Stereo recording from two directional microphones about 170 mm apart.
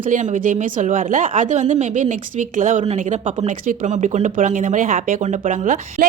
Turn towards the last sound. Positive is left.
turn(degrees=-50)  # may be behind; listen again after turning